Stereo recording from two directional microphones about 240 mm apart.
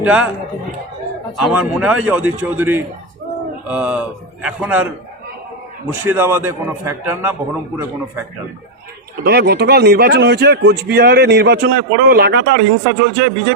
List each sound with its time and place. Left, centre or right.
0.0 s speech: centre
1.4 s a man's voice: centre
5.9 s a man's voice: centre
9.2 s a man's voice: right